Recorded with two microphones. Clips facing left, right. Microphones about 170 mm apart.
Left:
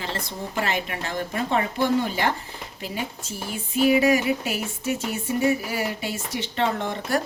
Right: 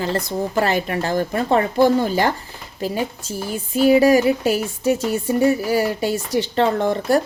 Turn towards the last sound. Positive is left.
turn(degrees=-35)  # may be behind; listen again after turning